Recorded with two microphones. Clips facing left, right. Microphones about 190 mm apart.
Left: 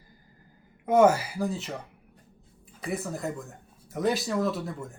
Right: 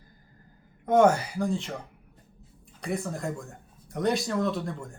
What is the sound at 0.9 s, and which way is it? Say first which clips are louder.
Speech: even; 5° left (ahead or behind).